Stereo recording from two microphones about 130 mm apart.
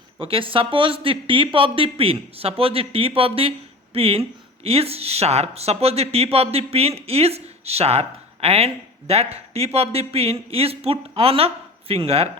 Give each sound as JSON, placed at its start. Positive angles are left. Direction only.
{"t": 0.2, "sound": "speech", "side_deg": -45}